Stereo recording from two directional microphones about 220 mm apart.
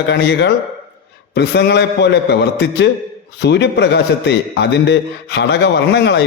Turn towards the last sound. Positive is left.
turn(degrees=50)  # may be behind; listen again after turning